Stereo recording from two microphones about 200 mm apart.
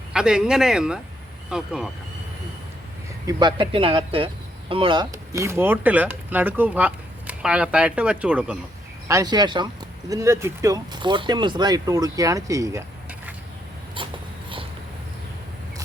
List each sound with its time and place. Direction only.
0.1 s speech: 5° right (ahead or behind)
3.2 s speech: 20° right (ahead or behind)
9.0 s speech: 20° right (ahead or behind)